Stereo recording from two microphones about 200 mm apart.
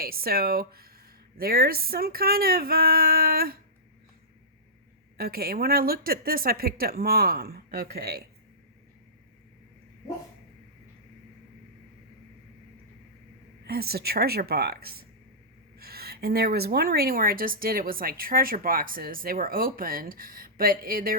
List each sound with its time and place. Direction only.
0.0 s a woman's voice: 50° right (ahead or behind)
5.1 s a woman's voice: 50° right (ahead or behind)
13.7 s a woman's voice: 50° right (ahead or behind)